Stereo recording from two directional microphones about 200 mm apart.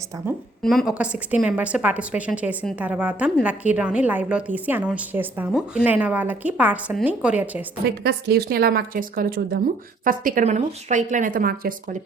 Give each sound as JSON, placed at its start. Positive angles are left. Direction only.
{"t": 0.6, "sound": "a woman's voice", "side_deg": 0}
{"t": 8.0, "sound": "speech", "side_deg": -50}